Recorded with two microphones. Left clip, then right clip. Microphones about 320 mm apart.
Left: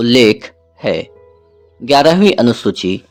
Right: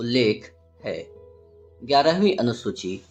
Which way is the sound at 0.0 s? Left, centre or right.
Left.